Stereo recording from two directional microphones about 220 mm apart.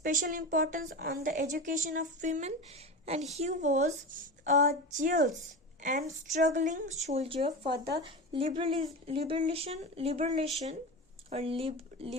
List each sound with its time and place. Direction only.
0.0 s a woman's voice: 35° right (ahead or behind)